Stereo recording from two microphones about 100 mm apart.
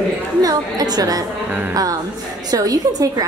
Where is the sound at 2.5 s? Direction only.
35° right (ahead or behind).